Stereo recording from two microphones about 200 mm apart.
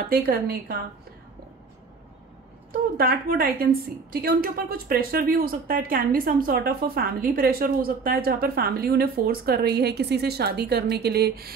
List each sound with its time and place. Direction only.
0.1 s a woman's voice: 50° right (ahead or behind)
3.0 s a woman's voice: 45° right (ahead or behind)